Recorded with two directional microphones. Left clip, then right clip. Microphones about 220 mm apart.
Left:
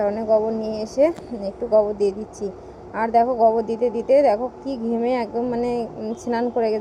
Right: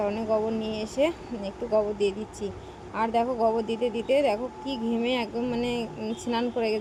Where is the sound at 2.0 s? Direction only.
25° left (ahead or behind).